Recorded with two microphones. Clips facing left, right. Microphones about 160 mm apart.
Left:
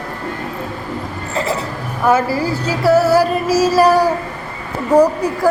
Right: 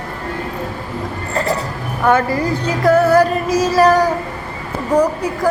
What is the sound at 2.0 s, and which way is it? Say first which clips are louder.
Female singing: even; 5° left (ahead or behind).